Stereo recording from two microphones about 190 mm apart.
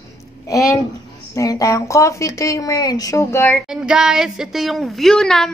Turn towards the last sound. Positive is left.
turn(degrees=5)  # may be behind; listen again after turning